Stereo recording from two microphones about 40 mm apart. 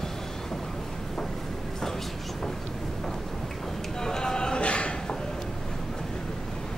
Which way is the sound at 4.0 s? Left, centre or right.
Centre.